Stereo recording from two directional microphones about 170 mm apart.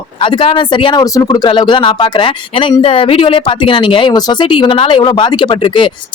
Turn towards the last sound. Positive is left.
turn(degrees=30)  # may be behind; listen again after turning